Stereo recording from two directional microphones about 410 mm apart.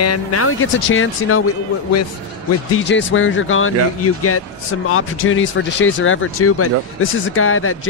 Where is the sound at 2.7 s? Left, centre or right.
Left.